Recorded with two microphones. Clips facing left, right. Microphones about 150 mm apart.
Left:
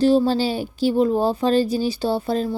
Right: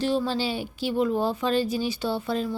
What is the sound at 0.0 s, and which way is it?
A woman's voice, 35° left (ahead or behind).